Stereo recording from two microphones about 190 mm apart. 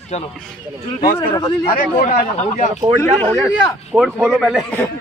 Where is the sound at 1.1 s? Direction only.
25° left (ahead or behind).